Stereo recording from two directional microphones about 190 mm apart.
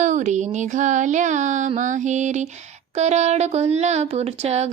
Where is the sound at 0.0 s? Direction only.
40° right (ahead or behind).